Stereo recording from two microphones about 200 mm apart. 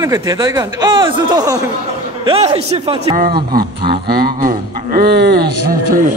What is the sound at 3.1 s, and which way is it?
Speech, 45° right (ahead or behind).